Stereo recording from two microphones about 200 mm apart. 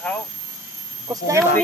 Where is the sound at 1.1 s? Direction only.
15° right (ahead or behind).